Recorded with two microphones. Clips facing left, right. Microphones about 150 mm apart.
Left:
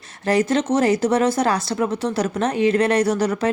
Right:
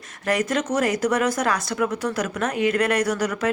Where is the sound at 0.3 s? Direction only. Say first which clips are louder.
Left 4 dB; 30° left (ahead or behind).